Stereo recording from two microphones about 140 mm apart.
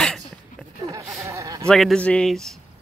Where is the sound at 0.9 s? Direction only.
25° right (ahead or behind).